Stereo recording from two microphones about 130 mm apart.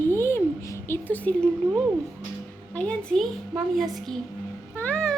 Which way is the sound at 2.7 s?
10° left (ahead or behind).